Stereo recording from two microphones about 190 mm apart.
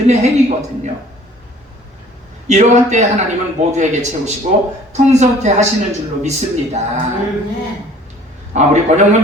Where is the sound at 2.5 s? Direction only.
40° right (ahead or behind).